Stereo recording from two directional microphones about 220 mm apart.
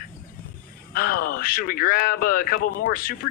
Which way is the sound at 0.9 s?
45° left (ahead or behind).